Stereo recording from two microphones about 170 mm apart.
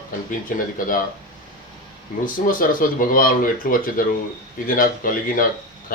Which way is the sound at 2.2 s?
55° left (ahead or behind).